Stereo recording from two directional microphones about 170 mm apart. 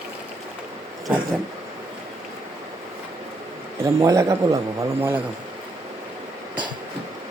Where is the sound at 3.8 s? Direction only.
20° right (ahead or behind).